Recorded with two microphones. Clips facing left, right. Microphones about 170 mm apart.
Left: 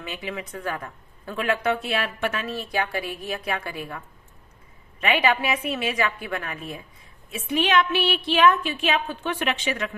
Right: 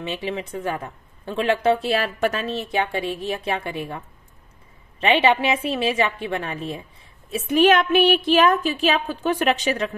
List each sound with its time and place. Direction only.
0.0 s speech: 30° right (ahead or behind)
5.0 s speech: 25° right (ahead or behind)
7.2 s a woman's voice: 40° right (ahead or behind)